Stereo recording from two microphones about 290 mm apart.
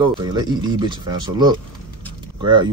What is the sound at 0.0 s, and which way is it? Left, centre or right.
Speech, centre.